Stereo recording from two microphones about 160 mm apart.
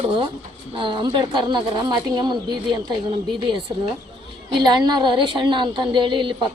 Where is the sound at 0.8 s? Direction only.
30° right (ahead or behind).